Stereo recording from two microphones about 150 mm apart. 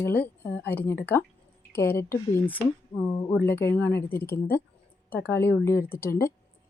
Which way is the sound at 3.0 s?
25° left (ahead or behind).